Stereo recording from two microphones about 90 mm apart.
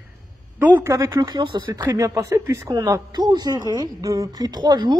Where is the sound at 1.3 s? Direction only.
60° right (ahead or behind).